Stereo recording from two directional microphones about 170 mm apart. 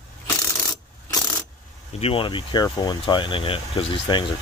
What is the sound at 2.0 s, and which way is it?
Speech, 30° left (ahead or behind).